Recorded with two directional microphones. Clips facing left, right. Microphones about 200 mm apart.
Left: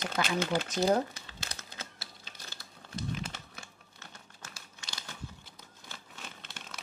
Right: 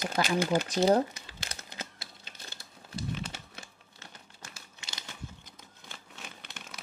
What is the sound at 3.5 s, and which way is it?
Music, 20° right (ahead or behind).